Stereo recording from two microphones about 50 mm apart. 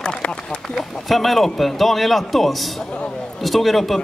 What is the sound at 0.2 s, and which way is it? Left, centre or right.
Speech, centre.